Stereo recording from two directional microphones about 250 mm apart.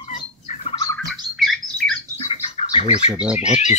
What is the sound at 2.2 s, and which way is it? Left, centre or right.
Bird, left.